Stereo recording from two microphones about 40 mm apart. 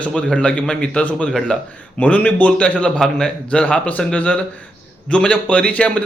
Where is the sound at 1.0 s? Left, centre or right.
Left.